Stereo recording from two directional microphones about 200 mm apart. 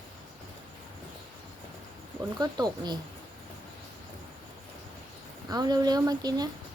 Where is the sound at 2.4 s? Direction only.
20° right (ahead or behind).